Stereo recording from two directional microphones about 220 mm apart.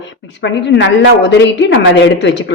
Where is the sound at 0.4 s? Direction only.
55° left (ahead or behind).